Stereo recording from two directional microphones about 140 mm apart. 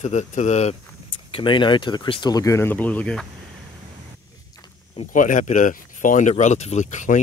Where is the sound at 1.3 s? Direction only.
35° left (ahead or behind); by 3.2 s 10° left (ahead or behind).